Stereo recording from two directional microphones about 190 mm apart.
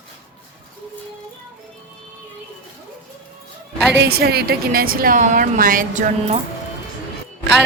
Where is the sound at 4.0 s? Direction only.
55° right (ahead or behind); by 6.4 s 40° right (ahead or behind).